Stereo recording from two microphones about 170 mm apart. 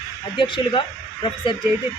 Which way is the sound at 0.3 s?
30° left (ahead or behind).